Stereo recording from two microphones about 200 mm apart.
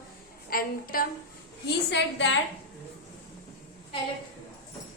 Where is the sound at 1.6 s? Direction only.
60° left (ahead or behind).